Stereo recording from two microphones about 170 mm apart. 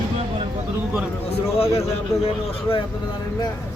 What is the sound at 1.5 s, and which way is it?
Speech, 35° left (ahead or behind).